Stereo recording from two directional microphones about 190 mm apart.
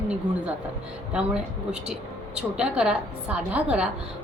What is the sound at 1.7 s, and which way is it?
A woman's voice, 5° right (ahead or behind).